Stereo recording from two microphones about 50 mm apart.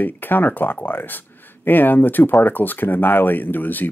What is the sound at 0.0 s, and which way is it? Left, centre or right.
Speech, left.